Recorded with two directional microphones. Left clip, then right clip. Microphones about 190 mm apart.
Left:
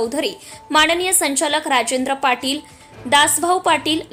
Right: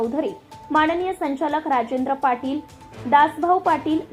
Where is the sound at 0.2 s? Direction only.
15° left (ahead or behind).